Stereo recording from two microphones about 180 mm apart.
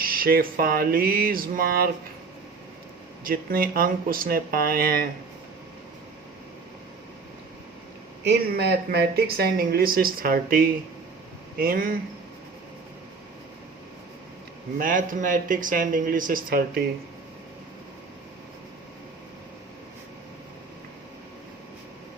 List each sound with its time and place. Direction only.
0.0 s speech: 55° right (ahead or behind)
3.2 s speech: 55° right (ahead or behind)
8.2 s speech: 65° right (ahead or behind)
14.8 s speech: 50° right (ahead or behind)